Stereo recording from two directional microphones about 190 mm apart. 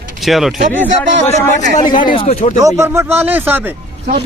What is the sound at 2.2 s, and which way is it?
Speech, 30° left (ahead or behind).